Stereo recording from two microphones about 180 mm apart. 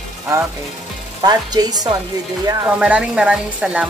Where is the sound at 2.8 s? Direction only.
5° right (ahead or behind).